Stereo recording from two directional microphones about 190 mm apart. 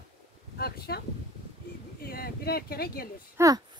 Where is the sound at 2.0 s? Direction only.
55° left (ahead or behind).